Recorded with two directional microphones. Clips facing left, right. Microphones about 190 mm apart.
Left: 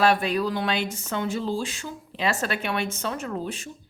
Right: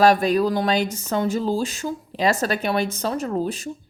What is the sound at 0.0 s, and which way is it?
Speech, 40° right (ahead or behind).